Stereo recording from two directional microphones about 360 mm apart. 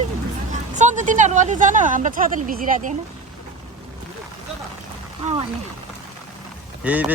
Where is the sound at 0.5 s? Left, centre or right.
Centre.